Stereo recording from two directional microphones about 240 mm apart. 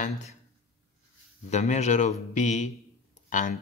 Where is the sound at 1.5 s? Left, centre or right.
Left.